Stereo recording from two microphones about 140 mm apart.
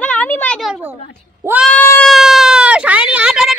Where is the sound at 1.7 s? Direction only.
10° left (ahead or behind).